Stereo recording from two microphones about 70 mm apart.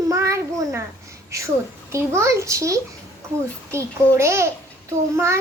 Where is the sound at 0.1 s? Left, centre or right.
Right.